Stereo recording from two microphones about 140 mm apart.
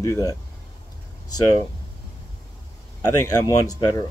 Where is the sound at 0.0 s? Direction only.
25° left (ahead or behind).